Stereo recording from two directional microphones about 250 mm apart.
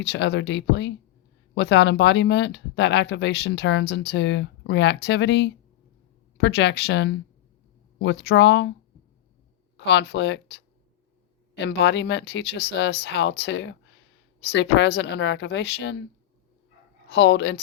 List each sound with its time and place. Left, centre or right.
0.0 s speech: left
9.7 s speech: left
17.1 s speech: left